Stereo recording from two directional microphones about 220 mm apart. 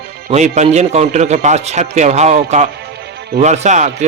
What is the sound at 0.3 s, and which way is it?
A man's voice, 30° right (ahead or behind).